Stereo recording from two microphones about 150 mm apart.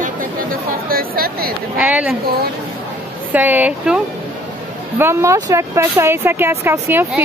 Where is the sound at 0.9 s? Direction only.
80° right.